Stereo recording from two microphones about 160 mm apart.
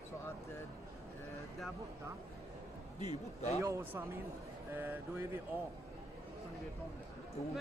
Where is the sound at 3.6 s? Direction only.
15° right (ahead or behind).